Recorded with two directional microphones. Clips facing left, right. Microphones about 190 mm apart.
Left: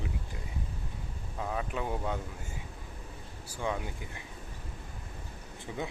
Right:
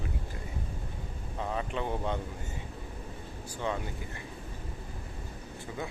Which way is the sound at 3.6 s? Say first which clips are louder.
Even; 10° left (ahead or behind).